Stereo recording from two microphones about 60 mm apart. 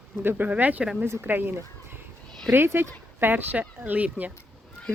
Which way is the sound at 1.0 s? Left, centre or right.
Right.